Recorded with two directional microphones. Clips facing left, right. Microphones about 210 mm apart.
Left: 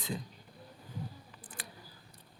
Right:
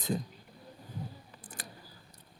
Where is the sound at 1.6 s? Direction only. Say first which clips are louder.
Right 1 dB; 40° right (ahead or behind).